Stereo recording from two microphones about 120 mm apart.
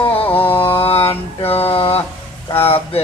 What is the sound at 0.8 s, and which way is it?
Mantra, 50° left (ahead or behind).